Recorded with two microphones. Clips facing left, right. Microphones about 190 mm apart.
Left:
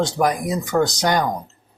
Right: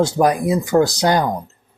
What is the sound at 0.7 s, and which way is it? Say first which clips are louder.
Speech: right 4 dB; 25° right (ahead or behind).